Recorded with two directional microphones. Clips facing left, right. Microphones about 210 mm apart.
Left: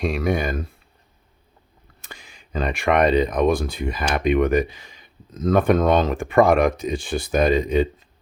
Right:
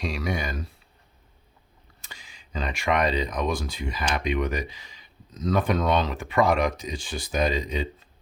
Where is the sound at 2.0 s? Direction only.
55° left (ahead or behind).